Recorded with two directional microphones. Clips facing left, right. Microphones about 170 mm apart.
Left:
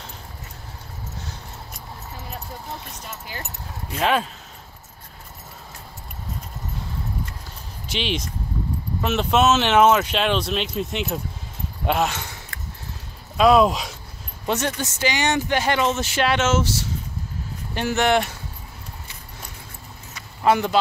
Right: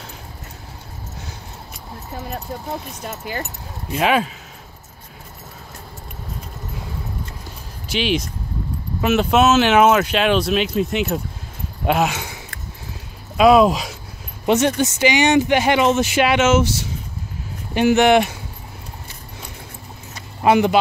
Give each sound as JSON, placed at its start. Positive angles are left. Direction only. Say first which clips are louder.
{"t": 3.1, "sound": "speech", "louder": "right 9 dB", "side_deg": -60}
{"t": 3.9, "sound": "speech", "louder": "right 3 dB", "side_deg": -5}
{"t": 7.9, "sound": "speech", "louder": "right 6 dB", "side_deg": -5}
{"t": 13.4, "sound": "speech", "louder": "right 3 dB", "side_deg": -5}
{"t": 14.4, "sound": "speech", "louder": "right 8 dB", "side_deg": -20}
{"t": 17.7, "sound": "speech", "louder": "right 7 dB", "side_deg": -15}
{"t": 20.4, "sound": "speech", "louder": "right 4 dB", "side_deg": -20}